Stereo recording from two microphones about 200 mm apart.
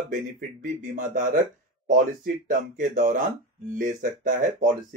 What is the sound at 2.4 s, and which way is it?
Speech, 40° right (ahead or behind).